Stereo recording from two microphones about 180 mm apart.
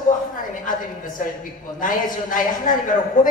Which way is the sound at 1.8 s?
50° left (ahead or behind).